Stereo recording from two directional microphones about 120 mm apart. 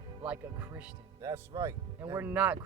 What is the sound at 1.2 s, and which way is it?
Speech, 25° right (ahead or behind).